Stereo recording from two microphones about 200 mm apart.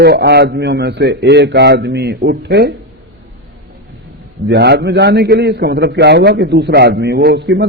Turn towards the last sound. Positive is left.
turn(degrees=-60)  # may be behind; listen again after turning